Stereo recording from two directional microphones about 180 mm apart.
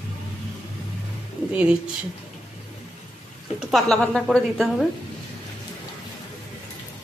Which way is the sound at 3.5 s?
Centre (ahead or behind).